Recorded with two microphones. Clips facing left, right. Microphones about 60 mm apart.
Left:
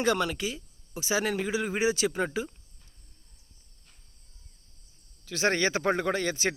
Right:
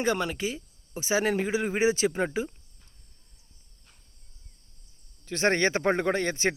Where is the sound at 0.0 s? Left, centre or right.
Right.